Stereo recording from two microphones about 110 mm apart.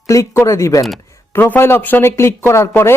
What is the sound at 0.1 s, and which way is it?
Speech, 30° left (ahead or behind).